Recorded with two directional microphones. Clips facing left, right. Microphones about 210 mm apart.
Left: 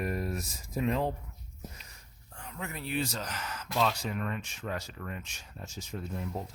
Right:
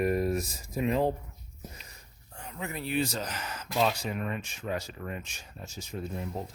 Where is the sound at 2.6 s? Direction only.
5° right (ahead or behind).